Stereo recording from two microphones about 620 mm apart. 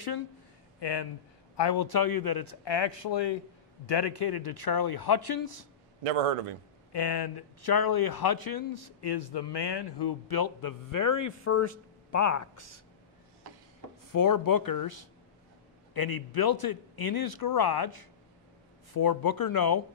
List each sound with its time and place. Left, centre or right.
0.7 s speech: left
6.0 s a man's voice: right
6.9 s speech: left
14.1 s speech: left
15.9 s speech: left